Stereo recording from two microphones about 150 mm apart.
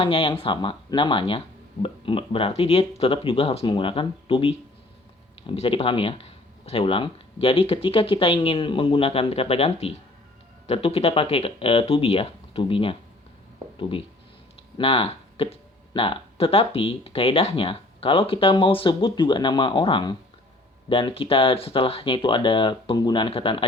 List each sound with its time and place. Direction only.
0.0 s speech: 35° left (ahead or behind)